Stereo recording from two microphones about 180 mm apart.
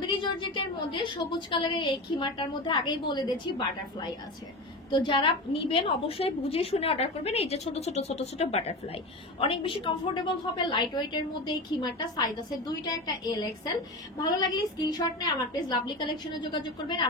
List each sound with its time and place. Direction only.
0.0 s a woman's voice: 25° left (ahead or behind)